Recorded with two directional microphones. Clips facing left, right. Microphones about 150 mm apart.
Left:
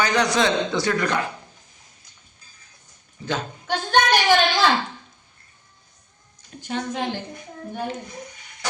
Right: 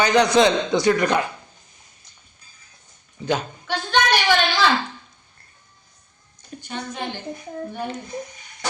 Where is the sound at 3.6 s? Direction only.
45° left (ahead or behind).